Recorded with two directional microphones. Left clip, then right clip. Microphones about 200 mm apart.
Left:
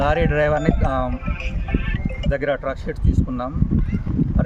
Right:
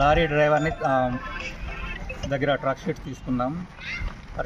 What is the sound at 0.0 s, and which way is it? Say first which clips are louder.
Speech: left 1 dB; 20° left (ahead or behind).